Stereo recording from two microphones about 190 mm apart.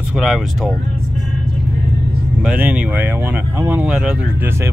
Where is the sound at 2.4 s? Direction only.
10° right (ahead or behind).